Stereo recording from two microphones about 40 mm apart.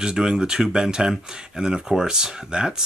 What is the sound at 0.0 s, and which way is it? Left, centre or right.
Speech, centre.